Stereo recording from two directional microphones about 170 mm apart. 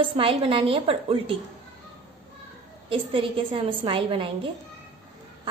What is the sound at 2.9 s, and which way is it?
A woman's voice, 30° right (ahead or behind).